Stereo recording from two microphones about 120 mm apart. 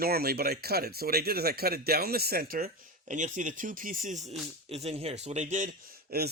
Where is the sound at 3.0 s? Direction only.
90° right.